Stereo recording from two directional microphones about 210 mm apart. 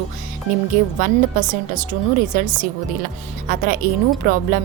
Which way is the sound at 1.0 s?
40° right (ahead or behind).